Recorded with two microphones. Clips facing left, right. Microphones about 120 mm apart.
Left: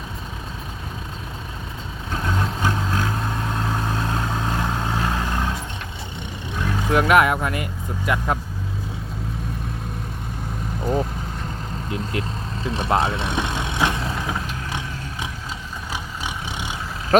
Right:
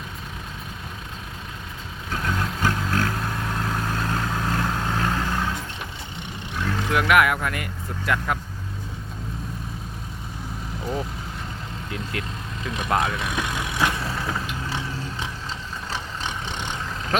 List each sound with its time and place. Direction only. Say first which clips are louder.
2.2 s vehicle: left 1 dB; 20° left (ahead or behind)
6.6 s vehicle: left 2 dB; 15° left (ahead or behind)
6.9 s speech: left 3 dB; 30° left (ahead or behind)
12.6 s vehicle: left 3 dB; 30° left (ahead or behind); by 16.7 s 10° left (ahead or behind)